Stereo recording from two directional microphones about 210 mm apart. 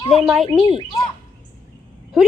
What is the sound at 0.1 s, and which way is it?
Speech, centre (ahead or behind).